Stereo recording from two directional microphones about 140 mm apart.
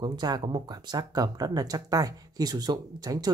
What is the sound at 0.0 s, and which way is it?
Speech, 30° right (ahead or behind).